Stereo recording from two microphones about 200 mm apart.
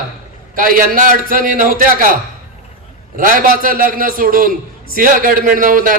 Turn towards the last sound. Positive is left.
turn(degrees=-45)  # may be behind; listen again after turning